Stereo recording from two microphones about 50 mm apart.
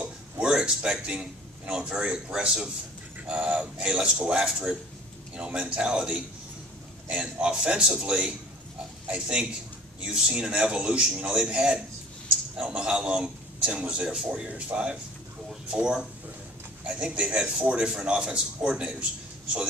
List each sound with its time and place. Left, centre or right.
0.4 s a man's voice: centre
5.3 s a man's voice: right